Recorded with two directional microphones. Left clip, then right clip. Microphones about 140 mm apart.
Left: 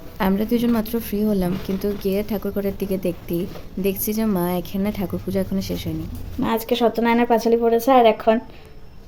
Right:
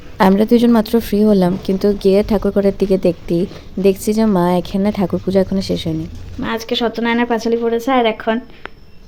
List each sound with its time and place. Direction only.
0.2 s a woman's voice: 40° right (ahead or behind)
6.4 s a woman's voice: 20° left (ahead or behind)